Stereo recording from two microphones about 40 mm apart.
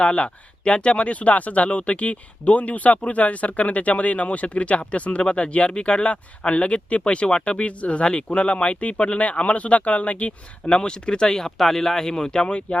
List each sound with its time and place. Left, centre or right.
0.0 s speech: left
10.7 s speech: left